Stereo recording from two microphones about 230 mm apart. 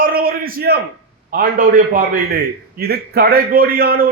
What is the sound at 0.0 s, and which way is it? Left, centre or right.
A man's voice, right.